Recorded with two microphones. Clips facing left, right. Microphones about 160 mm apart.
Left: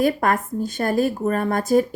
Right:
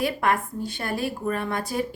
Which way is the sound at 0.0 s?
45° left (ahead or behind).